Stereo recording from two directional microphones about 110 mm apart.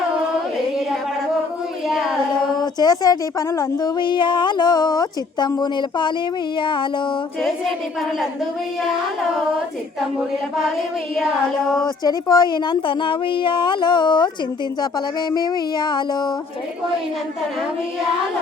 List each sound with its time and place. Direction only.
1.9 s carnatic music: 5° right (ahead or behind)
2.6 s a woman's voice: 35° left (ahead or behind)
12.0 s a woman's voice: 35° left (ahead or behind)